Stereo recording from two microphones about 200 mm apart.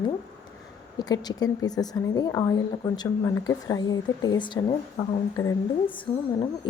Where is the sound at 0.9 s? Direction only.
20° left (ahead or behind).